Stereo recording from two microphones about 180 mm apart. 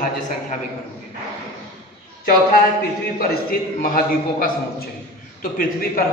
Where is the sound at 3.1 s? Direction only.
50° left (ahead or behind).